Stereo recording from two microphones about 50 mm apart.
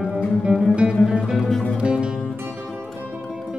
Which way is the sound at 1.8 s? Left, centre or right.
Centre.